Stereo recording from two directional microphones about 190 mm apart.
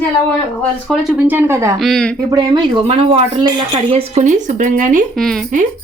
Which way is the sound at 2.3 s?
20° right (ahead or behind).